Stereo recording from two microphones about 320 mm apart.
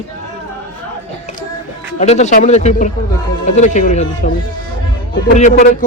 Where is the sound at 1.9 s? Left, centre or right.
Left.